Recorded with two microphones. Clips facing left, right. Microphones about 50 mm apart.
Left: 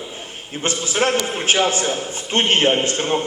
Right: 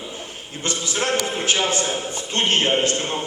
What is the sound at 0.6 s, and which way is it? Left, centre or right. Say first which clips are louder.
A man's voice: left 4 dB; left.